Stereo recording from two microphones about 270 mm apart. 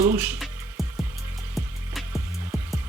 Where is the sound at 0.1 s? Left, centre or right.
Centre.